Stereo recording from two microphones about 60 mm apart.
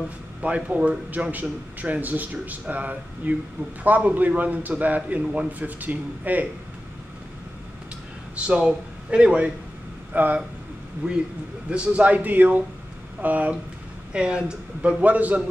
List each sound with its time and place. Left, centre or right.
0.4 s a man's voice: right
8.4 s speech: centre
10.1 s a man's voice: right
11.7 s a man's voice: centre
14.1 s a man's voice: centre